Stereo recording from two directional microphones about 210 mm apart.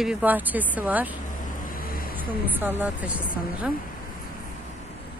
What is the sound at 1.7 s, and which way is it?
Vehicle, 45° left (ahead or behind).